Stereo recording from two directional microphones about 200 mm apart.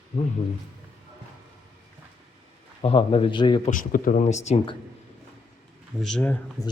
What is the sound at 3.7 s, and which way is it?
Speech, 40° left (ahead or behind).